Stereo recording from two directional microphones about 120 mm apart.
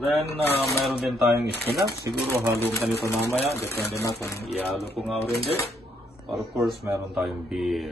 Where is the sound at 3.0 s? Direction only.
20° left (ahead or behind).